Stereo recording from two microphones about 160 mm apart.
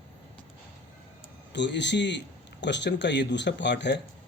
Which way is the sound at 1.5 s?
90° left.